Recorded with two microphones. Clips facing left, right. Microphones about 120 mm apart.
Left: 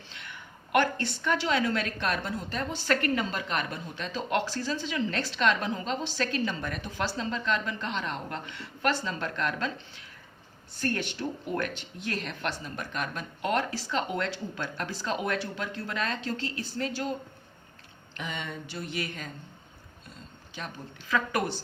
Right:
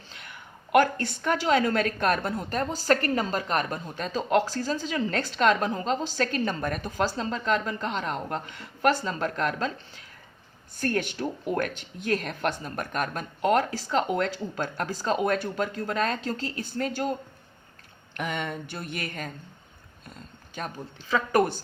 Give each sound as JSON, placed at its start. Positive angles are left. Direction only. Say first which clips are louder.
{"t": 0.1, "sound": "a woman's voice", "louder": "right 1 dB", "side_deg": -40}
{"t": 20.6, "sound": "a woman's voice", "louder": "right 4 dB", "side_deg": -45}